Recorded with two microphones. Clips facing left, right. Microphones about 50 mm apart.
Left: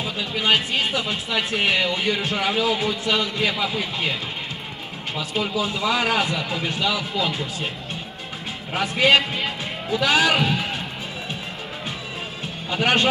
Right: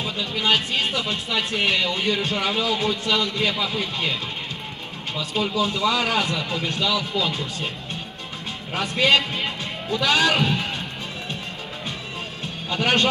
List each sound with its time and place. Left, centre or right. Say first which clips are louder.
0.0 s speech: even; centre
5.3 s speech: right 2 dB; centre
9.1 s music: left 1 dB; centre
9.9 s speech: left 1 dB; left
12.6 s speech: left 1 dB; centre